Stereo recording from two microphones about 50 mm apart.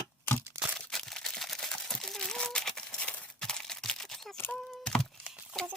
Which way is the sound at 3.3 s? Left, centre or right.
Centre.